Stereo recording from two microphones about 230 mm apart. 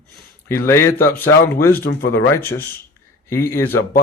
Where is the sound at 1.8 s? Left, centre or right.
Left.